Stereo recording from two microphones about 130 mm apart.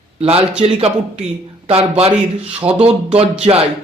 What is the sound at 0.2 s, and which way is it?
Speech, 50° right (ahead or behind).